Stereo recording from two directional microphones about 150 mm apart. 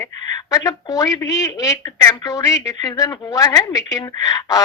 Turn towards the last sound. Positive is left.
turn(degrees=25)  # may be behind; listen again after turning